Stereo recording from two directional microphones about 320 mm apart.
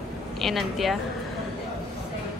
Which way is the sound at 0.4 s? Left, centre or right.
Centre.